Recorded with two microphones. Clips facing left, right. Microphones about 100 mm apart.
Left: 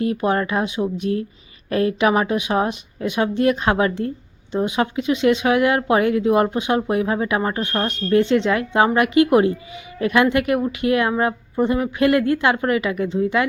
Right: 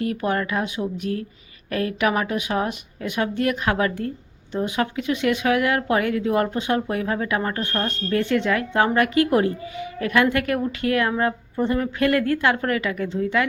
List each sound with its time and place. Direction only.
0.0 s speech: 25° left (ahead or behind)